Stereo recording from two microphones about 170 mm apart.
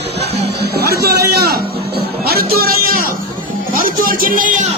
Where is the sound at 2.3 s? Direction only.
65° right (ahead or behind).